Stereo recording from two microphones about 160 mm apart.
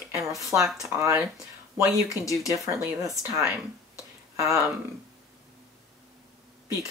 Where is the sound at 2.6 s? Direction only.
20° right (ahead or behind).